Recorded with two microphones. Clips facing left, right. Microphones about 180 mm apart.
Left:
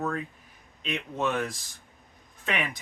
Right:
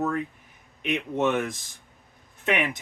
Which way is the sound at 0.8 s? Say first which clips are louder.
Right 5 dB; 20° right (ahead or behind).